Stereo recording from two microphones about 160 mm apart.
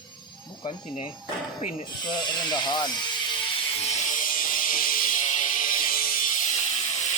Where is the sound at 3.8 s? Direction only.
45° left (ahead or behind); by 6.5 s 60° left (ahead or behind).